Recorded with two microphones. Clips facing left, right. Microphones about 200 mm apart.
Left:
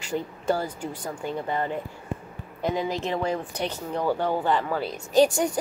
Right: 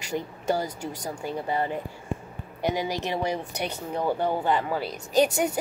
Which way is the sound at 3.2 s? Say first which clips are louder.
Left 1 dB; 15° right (ahead or behind).